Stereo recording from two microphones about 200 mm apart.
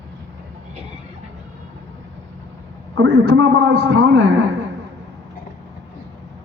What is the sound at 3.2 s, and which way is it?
A man's voice, 65° right (ahead or behind).